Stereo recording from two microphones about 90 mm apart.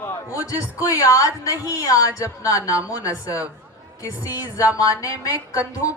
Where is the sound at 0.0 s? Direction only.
35° left (ahead or behind).